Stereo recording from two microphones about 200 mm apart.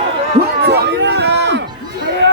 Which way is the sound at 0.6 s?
55° right (ahead or behind).